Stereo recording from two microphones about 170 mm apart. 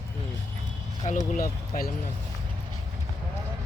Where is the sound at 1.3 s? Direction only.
55° left (ahead or behind).